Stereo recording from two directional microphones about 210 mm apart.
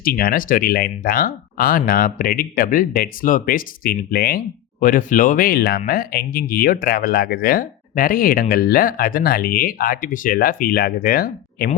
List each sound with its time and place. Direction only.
0.0 s speech: 45° left (ahead or behind)
4.8 s speech: 40° left (ahead or behind)